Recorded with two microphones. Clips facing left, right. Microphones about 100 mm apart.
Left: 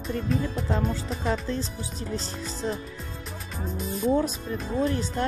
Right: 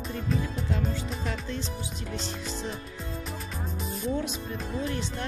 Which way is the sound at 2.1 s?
40° left (ahead or behind).